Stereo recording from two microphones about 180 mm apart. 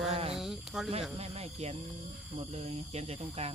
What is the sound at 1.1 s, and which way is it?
Speech, 35° right (ahead or behind).